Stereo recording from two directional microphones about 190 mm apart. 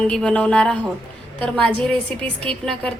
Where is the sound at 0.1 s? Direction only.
5° left (ahead or behind).